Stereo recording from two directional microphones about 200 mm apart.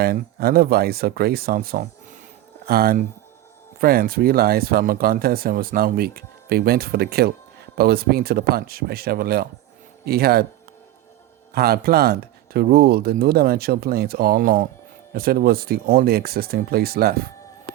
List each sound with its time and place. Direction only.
0.0 s speech: 50° right (ahead or behind)
11.5 s speech: 50° right (ahead or behind)